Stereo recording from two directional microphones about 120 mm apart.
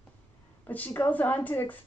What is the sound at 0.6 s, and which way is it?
Speech, 15° left (ahead or behind).